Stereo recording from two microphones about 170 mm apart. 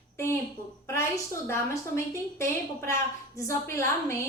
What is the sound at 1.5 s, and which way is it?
A woman's voice, 15° left (ahead or behind).